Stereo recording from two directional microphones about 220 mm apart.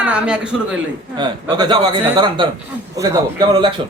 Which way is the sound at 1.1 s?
20° right (ahead or behind).